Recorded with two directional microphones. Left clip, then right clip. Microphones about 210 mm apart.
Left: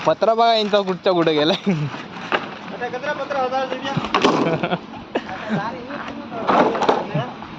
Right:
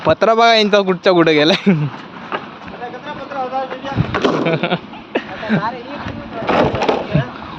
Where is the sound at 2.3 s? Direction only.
45° left (ahead or behind).